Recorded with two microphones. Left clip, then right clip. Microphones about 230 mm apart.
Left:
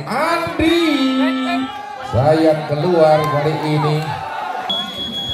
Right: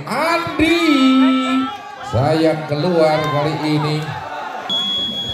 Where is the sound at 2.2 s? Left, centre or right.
Right.